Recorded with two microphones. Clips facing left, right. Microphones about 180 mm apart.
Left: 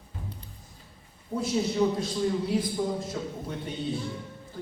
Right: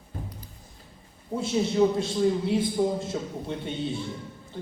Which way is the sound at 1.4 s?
25° right (ahead or behind).